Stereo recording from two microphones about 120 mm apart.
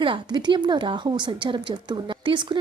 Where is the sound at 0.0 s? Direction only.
40° right (ahead or behind).